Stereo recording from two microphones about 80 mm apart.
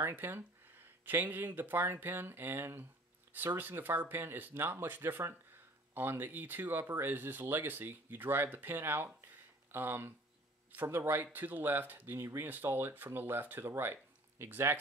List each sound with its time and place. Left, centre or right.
0.1 s speech: right